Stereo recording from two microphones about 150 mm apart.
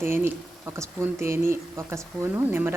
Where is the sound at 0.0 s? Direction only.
15° right (ahead or behind).